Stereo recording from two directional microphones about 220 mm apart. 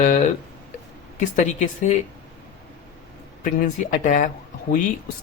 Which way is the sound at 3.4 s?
35° left (ahead or behind).